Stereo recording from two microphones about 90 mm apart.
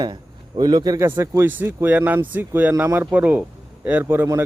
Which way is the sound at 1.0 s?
30° right (ahead or behind).